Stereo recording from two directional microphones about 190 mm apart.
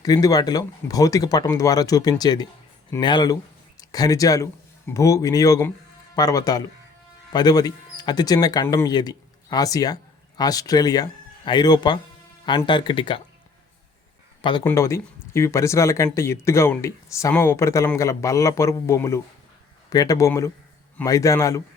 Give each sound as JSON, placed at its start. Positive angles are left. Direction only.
{"t": 0.0, "sound": "speech", "side_deg": 20}
{"t": 14.4, "sound": "speech", "side_deg": 25}